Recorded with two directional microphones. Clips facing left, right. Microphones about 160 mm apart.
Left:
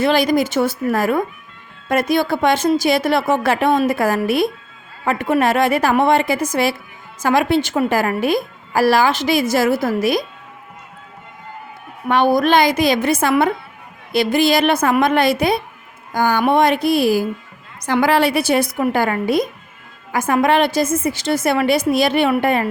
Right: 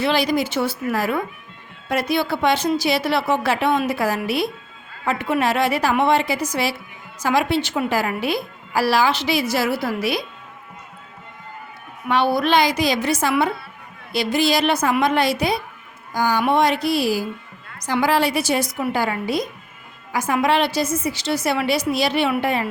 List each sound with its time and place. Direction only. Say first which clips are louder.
0.0 s a woman's voice: left 4 dB; 50° left (ahead or behind)
12.0 s a woman's voice: left 4 dB; 50° left (ahead or behind)